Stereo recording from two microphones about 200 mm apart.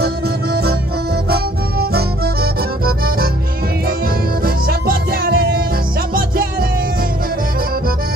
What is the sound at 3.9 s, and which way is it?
Music, 50° right (ahead or behind).